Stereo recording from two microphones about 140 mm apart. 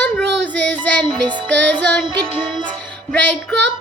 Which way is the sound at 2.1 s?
35° right (ahead or behind).